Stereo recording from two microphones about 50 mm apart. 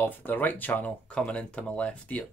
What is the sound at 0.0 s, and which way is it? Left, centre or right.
Speech, left.